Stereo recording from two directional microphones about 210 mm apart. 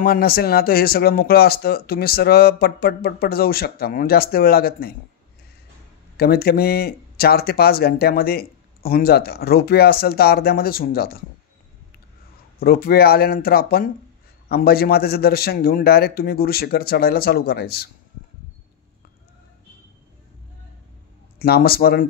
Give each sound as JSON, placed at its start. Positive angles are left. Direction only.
{"t": 0.0, "sound": "speech", "side_deg": 45}
{"t": 6.1, "sound": "speech", "side_deg": 50}
{"t": 12.5, "sound": "speech", "side_deg": 45}
{"t": 21.4, "sound": "speech", "side_deg": 45}